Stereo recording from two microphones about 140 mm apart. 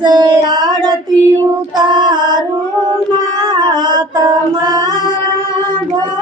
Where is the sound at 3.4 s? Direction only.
30° right (ahead or behind).